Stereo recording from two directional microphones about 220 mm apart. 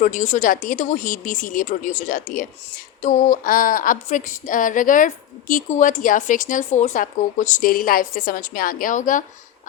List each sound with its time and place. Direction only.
0.0 s speech: 35° left (ahead or behind)